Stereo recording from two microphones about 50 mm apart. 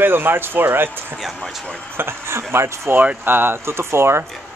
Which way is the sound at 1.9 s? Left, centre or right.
Right.